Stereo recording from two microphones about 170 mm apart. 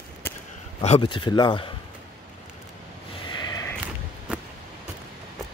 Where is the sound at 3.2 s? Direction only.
25° left (ahead or behind).